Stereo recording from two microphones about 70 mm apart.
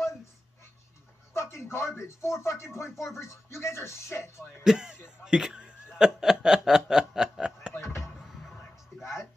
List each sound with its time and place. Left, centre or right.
1.3 s a sound: left
2.0 s speech: left
4.2 s speech: centre
5.9 s snicker: centre
7.7 s a sound: left
9.0 s music: left